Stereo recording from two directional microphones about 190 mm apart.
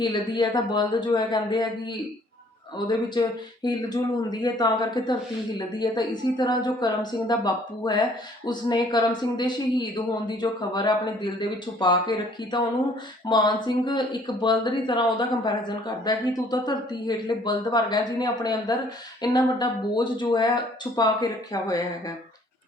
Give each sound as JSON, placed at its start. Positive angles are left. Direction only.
{"t": 0.0, "sound": "speech", "side_deg": 25}
{"t": 2.7, "sound": "speech", "side_deg": 25}